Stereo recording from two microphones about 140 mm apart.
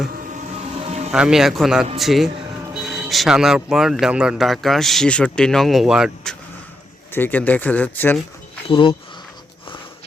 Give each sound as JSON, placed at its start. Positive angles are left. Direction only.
{"t": 0.6, "sound": "music", "side_deg": -50}
{"t": 1.1, "sound": "speech", "side_deg": -5}
{"t": 7.1, "sound": "speech", "side_deg": 15}
{"t": 8.7, "sound": "speech", "side_deg": 40}